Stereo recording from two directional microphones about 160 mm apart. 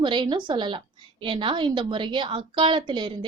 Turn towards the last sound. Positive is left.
turn(degrees=-30)  # may be behind; listen again after turning